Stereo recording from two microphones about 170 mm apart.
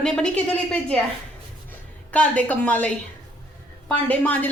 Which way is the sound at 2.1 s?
10° left (ahead or behind).